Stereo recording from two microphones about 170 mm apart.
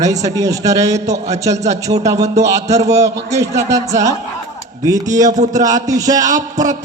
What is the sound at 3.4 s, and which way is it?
A man's voice, 20° right (ahead or behind).